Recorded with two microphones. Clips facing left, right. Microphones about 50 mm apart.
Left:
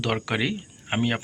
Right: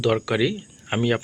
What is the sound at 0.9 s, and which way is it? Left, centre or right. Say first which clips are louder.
Speech: right 3 dB; centre.